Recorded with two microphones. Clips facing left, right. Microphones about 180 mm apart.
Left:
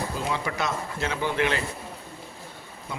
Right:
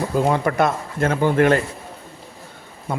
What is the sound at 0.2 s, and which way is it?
Speech, 50° right (ahead or behind).